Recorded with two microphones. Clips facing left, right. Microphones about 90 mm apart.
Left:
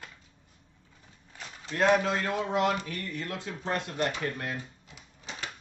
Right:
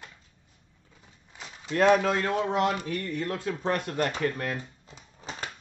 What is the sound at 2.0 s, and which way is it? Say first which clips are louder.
Speech: right 3 dB; 45° right (ahead or behind).